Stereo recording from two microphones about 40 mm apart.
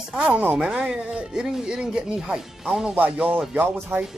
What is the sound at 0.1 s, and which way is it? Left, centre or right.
Speech, right.